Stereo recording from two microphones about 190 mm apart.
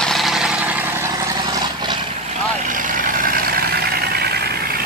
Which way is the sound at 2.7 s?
45° right (ahead or behind).